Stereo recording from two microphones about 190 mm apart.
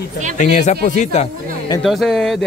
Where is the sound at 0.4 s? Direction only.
40° left (ahead or behind).